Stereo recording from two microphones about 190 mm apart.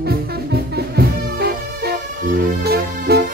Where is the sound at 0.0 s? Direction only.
55° right (ahead or behind).